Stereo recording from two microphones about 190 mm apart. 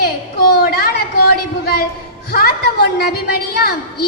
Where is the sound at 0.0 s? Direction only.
55° left (ahead or behind).